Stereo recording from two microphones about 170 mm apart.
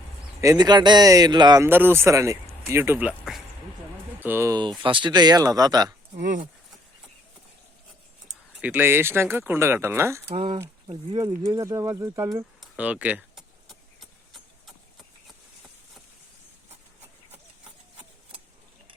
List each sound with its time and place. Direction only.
0.4 s speech: 25° right (ahead or behind)
1.6 s speech: 15° right (ahead or behind)
6.1 s speech: 45° right (ahead or behind)
8.3 s speech: 10° right (ahead or behind)
10.3 s speech: 30° right (ahead or behind)
12.5 s keys jangling: 10° right (ahead or behind)
13.7 s a sound: centre (ahead or behind)